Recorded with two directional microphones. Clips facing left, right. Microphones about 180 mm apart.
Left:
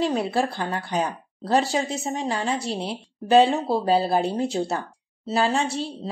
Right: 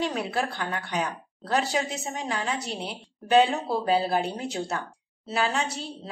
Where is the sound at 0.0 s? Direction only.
30° left (ahead or behind).